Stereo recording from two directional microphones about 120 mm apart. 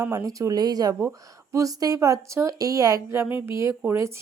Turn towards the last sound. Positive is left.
turn(degrees=-20)  # may be behind; listen again after turning